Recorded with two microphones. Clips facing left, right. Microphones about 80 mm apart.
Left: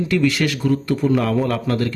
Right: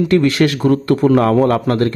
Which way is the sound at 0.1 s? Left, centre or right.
Right.